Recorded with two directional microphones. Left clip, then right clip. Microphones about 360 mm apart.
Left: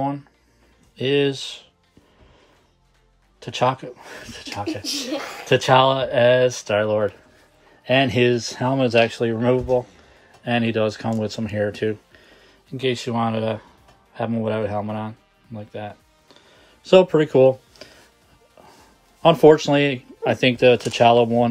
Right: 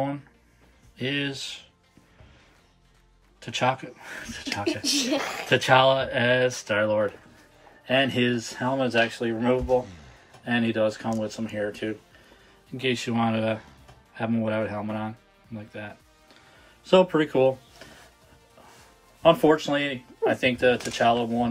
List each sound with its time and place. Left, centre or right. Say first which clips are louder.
0.9 s speech: left 9 dB; centre
3.3 s speech: left 4 dB; centre
4.8 s speech: right 1 dB; right
5.5 s speech: left 3 dB; centre
19.2 s speech: left 6 dB; centre